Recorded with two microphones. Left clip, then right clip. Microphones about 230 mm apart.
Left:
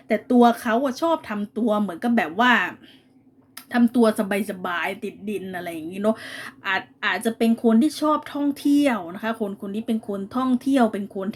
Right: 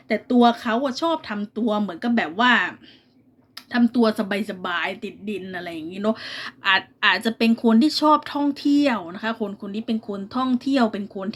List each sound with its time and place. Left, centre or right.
0.1 s speech: centre